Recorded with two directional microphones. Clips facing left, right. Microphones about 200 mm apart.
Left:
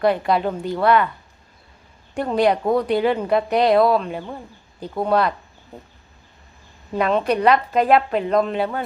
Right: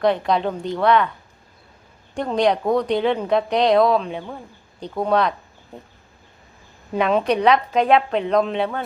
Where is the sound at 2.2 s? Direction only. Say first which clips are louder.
Left 1 dB; 5° left (ahead or behind).